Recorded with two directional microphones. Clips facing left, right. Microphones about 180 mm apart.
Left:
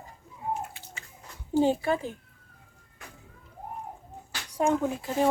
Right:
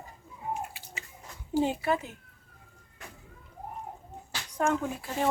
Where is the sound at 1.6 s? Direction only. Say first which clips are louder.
Left 3 dB; 30° left (ahead or behind).